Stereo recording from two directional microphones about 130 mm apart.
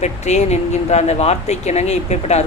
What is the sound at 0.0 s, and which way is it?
Speech, 60° left (ahead or behind).